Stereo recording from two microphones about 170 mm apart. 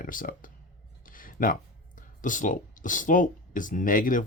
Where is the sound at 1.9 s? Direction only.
50° left (ahead or behind).